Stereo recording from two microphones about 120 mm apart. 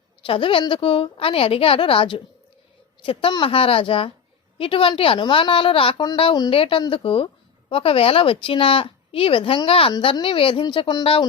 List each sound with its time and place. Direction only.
0.3 s speech: 45° left (ahead or behind)